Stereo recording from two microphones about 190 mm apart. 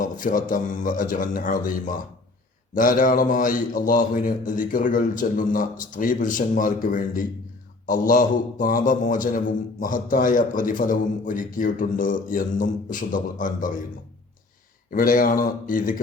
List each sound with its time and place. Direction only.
0.0 s a man's voice: 45° left (ahead or behind)
14.8 s a man's voice: 45° left (ahead or behind)